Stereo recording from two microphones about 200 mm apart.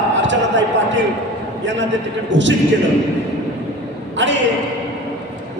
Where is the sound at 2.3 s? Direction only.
65° right (ahead or behind).